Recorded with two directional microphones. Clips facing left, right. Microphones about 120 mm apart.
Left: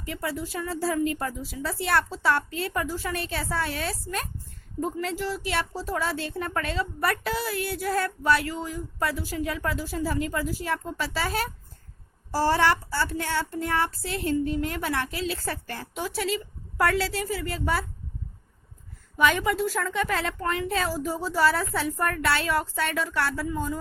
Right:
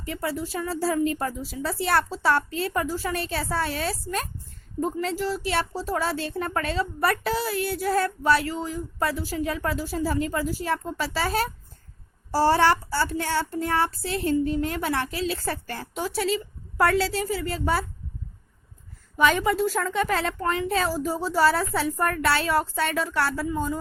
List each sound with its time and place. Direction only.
0.0 s a woman's voice: 30° right (ahead or behind)
19.1 s a woman's voice: 35° right (ahead or behind)